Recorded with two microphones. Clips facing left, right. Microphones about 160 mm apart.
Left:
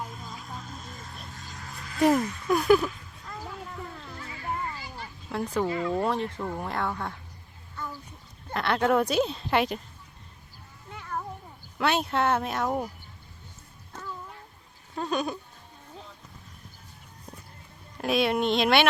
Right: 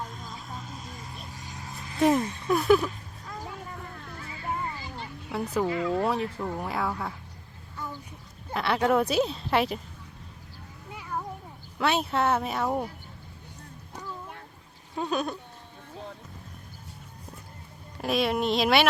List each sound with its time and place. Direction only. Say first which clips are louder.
0.0 s vehicle: even; 5° left (ahead or behind)
1.3 s vehicle: right 1 dB; 15° right (ahead or behind)
2.1 s speech: even; 30° right (ahead or behind)
2.5 s speech: even; centre (ahead or behind)
5.6 s speech: right 1 dB; 5° right (ahead or behind)
8.4 s speech: even; 5° right (ahead or behind)
10.9 s a sound: even; 5° right (ahead or behind)
11.8 s speech: even; centre (ahead or behind)
14.9 s speech: even; 5° right (ahead or behind)
17.9 s speech: left 1 dB; centre (ahead or behind)